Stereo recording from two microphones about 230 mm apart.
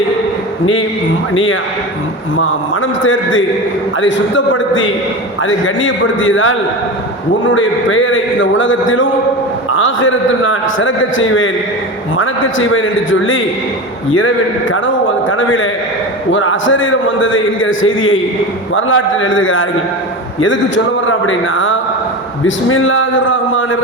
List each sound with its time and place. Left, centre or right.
2.3 s a man's voice: left